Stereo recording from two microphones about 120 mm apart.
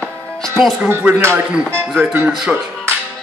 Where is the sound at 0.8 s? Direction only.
15° right (ahead or behind).